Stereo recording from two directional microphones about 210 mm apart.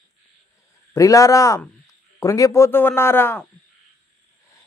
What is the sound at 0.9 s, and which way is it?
Speech, 15° left (ahead or behind).